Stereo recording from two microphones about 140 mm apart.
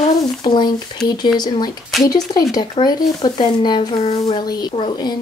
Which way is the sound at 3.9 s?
45° left (ahead or behind).